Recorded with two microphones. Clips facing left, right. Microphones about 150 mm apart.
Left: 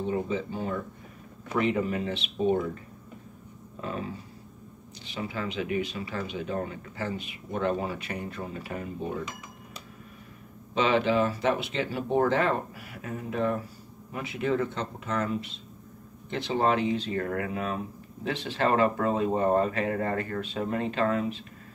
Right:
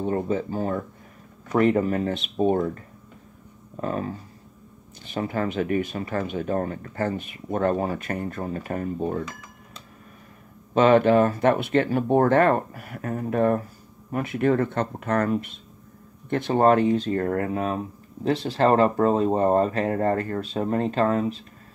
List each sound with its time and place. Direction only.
0.0 s speech: 50° right (ahead or behind)
3.8 s speech: 45° right (ahead or behind)
10.7 s speech: 50° right (ahead or behind)